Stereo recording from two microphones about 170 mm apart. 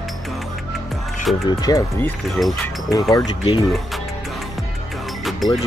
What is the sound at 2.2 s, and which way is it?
Speech, centre (ahead or behind).